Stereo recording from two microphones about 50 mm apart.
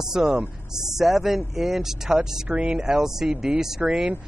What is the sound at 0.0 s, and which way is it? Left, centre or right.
Speech, centre.